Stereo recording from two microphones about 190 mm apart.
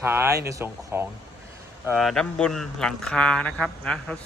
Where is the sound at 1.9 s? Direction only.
Centre (ahead or behind).